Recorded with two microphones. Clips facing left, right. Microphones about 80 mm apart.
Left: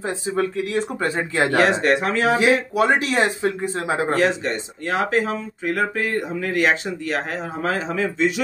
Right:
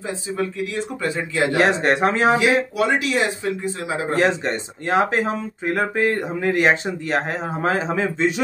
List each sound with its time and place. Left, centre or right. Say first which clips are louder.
0.0 s speech: left 2 dB; left
1.6 s speech: right 1 dB; right
2.3 s speech: left 1 dB; left
4.1 s speech: right 3 dB; right